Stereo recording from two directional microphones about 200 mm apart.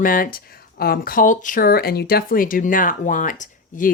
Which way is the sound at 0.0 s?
45° left (ahead or behind).